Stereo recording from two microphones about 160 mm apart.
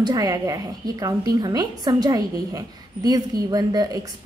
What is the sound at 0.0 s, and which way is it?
A woman's voice, 25° right (ahead or behind).